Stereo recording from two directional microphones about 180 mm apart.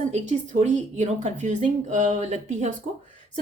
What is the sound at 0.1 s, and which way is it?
Speech, 40° right (ahead or behind).